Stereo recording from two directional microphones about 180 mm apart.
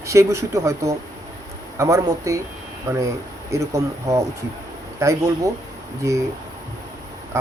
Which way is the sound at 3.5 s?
15° right (ahead or behind).